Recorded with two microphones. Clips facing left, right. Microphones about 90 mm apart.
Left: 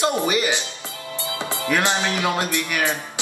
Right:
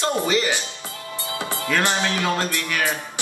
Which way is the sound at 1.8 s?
15° left (ahead or behind).